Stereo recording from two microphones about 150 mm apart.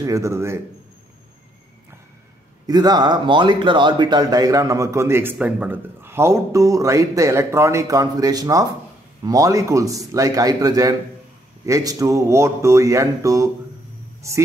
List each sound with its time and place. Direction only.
0.0 s speech: 20° right (ahead or behind)
2.6 s speech: 25° right (ahead or behind)